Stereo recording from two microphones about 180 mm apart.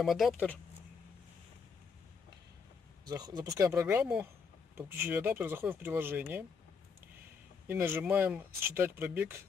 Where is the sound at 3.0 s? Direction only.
20° right (ahead or behind).